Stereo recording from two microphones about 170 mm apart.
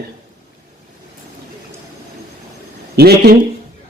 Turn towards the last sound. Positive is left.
turn(degrees=-70)  # may be behind; listen again after turning